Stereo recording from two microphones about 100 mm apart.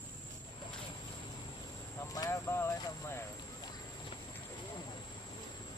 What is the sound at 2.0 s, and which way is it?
Speech, 30° left (ahead or behind).